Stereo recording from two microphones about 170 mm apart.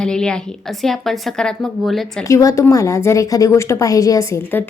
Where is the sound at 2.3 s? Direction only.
20° left (ahead or behind).